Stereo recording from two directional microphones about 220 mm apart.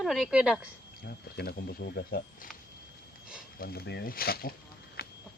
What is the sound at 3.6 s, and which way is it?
Speech, 45° left (ahead or behind).